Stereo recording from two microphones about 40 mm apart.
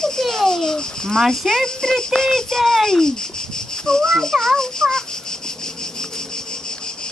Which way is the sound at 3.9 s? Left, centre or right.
Centre.